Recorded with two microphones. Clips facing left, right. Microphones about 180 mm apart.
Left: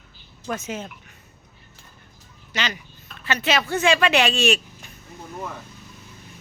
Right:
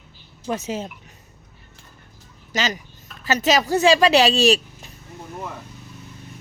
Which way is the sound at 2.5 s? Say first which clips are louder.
Right 4 dB; 40° right (ahead or behind).